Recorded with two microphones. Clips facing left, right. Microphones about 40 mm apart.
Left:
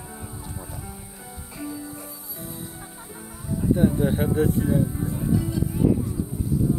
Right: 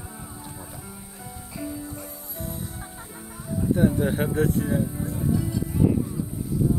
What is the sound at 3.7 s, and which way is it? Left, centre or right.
Speech, right.